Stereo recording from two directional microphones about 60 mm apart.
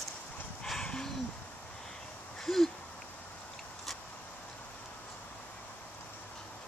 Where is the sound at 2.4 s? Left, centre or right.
Centre.